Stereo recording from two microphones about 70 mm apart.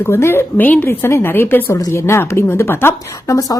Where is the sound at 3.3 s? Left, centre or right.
Left.